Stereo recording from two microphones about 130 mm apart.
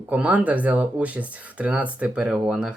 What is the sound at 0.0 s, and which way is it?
Speech, 10° right (ahead or behind).